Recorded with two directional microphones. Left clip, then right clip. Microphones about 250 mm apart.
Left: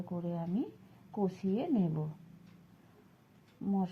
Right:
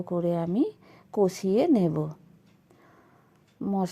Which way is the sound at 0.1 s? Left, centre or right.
Right.